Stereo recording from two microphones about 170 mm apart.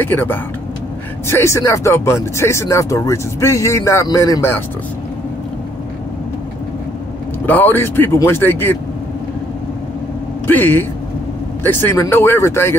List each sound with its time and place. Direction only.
0.0 s speech: 10° left (ahead or behind)
7.4 s speech: 10° left (ahead or behind)
10.4 s a man's voice: 10° left (ahead or behind)